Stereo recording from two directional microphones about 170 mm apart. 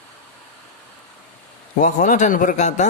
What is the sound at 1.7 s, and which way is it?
A man's voice, 50° left (ahead or behind).